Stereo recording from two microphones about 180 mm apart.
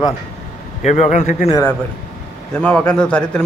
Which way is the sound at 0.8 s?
40° left (ahead or behind).